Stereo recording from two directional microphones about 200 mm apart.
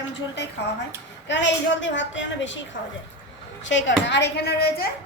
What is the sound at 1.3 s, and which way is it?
A woman's voice, 65° left (ahead or behind).